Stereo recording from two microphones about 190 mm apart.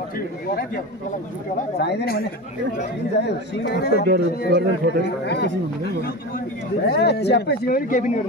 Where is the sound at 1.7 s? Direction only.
60° left (ahead or behind).